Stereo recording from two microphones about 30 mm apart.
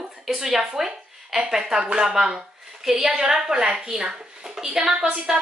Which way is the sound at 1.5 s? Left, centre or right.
Right.